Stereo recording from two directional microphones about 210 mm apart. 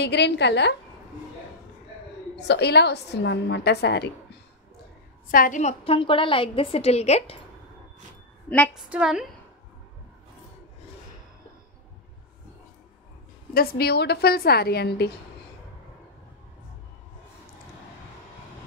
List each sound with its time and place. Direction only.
0.0 s a woman's voice: 55° left (ahead or behind)
2.3 s a woman's voice: 55° left (ahead or behind)
5.3 s a woman's voice: 40° left (ahead or behind)
8.5 s a woman's voice: 5° left (ahead or behind)
13.5 s a woman's voice: 45° left (ahead or behind)